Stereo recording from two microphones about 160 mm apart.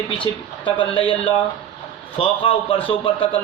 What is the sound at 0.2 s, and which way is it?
A man's voice, 30° left (ahead or behind).